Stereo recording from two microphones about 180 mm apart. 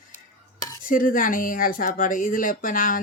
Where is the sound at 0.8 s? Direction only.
50° left (ahead or behind).